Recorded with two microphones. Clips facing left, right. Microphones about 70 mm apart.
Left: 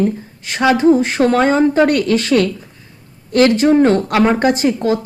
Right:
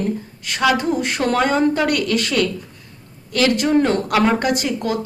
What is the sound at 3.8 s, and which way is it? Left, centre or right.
Speech, left.